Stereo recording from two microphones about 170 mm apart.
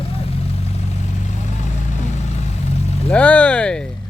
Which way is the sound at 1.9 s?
40° left (ahead or behind).